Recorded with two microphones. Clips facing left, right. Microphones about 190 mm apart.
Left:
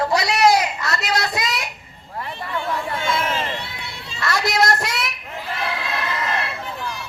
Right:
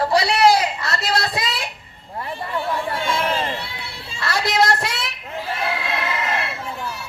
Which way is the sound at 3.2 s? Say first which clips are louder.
Right 2 dB; 35° right (ahead or behind).